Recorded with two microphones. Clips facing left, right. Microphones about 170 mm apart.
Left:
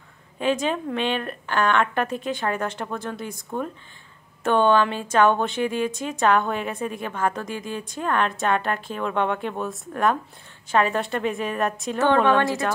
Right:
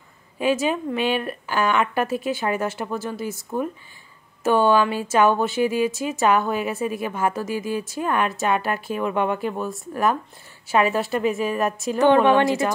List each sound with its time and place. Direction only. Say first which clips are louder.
0.4 s a woman's voice: right 2 dB; 10° right (ahead or behind)
12.0 s speech: right 3 dB; 15° right (ahead or behind)